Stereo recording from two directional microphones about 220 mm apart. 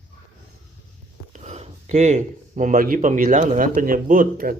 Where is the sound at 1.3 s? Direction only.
30° right (ahead or behind).